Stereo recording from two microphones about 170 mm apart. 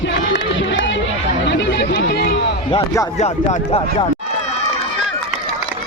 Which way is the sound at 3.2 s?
40° left (ahead or behind).